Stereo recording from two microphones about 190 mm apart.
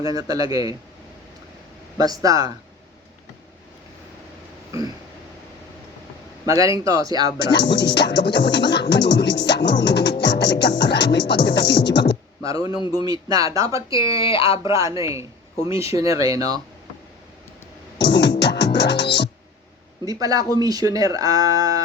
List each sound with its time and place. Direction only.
0.0 s speech: 20° right (ahead or behind)
2.0 s speech: 20° right (ahead or behind)
6.4 s speech: 20° right (ahead or behind)
7.4 s music: 65° left (ahead or behind)
12.4 s a sound: 20° right (ahead or behind)
13.0 s speech: 20° right (ahead or behind)
13.9 s speech: 25° left (ahead or behind)
14.6 s speech: 15° right (ahead or behind)
18.0 s music: 65° left (ahead or behind)
20.1 s speech: 20° right (ahead or behind)